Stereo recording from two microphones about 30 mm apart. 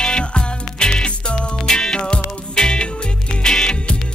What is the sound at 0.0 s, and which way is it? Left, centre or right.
Music, left.